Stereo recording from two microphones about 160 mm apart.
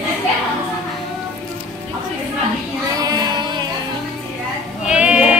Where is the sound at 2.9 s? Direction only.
25° right (ahead or behind).